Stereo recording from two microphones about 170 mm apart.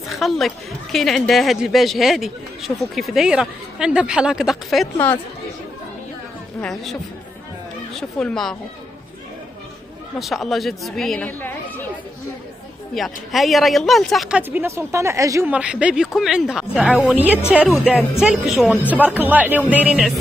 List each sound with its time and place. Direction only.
0.1 s speech: centre (ahead or behind)
4.9 s a woman's voice: 10° left (ahead or behind)
6.6 s speech: centre (ahead or behind)
10.1 s speech: centre (ahead or behind)
12.9 s speech: centre (ahead or behind)
14.5 s a woman's voice: 15° right (ahead or behind)
15.5 s a woman's voice: 5° right (ahead or behind)